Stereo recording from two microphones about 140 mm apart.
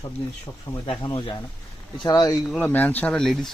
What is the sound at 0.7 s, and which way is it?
Speech, 35° left (ahead or behind).